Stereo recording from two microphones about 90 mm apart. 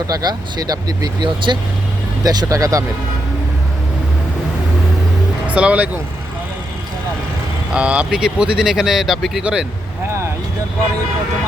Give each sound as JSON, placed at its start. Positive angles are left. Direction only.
{"t": 0.1, "sound": "speech", "side_deg": -50}
{"t": 5.5, "sound": "speech", "side_deg": -15}
{"t": 7.7, "sound": "speech", "side_deg": -15}